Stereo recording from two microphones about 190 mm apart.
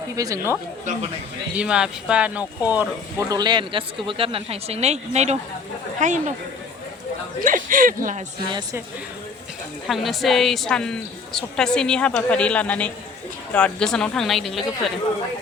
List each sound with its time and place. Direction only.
0.2 s speech: 15° right (ahead or behind)
1.5 s a woman's voice: 5° right (ahead or behind); by 6.3 s 40° right (ahead or behind)
7.4 s speech: 45° right (ahead or behind)
9.8 s a woman's voice: centre (ahead or behind)